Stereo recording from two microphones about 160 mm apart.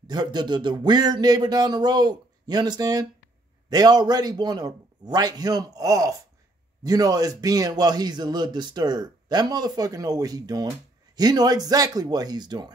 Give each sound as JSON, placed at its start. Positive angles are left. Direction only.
{"t": 0.0, "sound": "a man's voice", "side_deg": -25}